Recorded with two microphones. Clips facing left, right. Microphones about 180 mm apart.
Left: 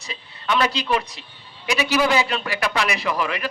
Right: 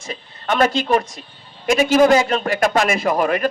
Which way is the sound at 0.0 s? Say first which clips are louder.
Right 3 dB; 45° right (ahead or behind).